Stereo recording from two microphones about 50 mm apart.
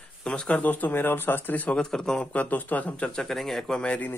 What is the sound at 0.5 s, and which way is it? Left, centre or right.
Speech, left.